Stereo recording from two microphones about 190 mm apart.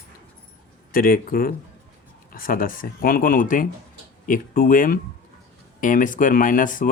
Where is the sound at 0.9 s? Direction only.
50° left (ahead or behind).